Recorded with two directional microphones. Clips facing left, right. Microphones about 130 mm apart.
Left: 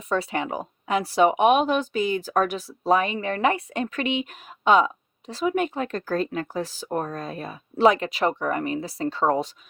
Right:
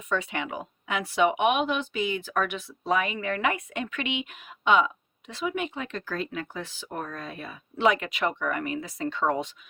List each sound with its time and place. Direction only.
0.1 s speech: 35° left (ahead or behind)